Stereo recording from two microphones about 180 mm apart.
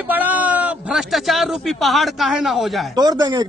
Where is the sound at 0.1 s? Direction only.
10° right (ahead or behind).